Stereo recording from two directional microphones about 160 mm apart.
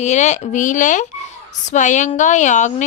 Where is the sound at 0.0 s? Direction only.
45° left (ahead or behind).